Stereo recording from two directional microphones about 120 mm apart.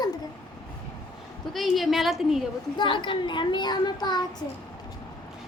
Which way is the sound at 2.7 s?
40° left (ahead or behind).